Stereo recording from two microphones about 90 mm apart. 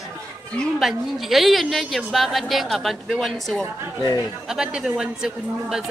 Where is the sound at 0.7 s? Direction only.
Centre (ahead or behind).